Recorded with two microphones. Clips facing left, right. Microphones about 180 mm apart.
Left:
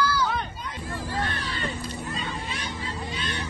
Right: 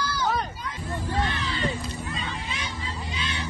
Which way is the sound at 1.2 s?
55° left (ahead or behind).